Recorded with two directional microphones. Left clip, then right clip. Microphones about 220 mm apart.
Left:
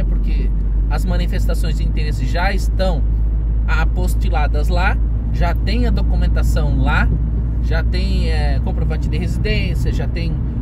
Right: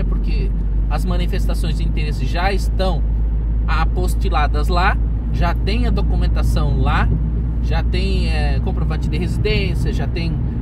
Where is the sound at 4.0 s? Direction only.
15° left (ahead or behind).